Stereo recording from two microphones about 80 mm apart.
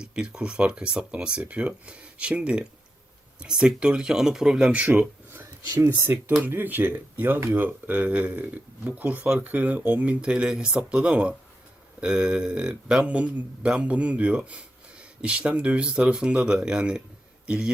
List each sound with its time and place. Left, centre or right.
0.0 s speech: centre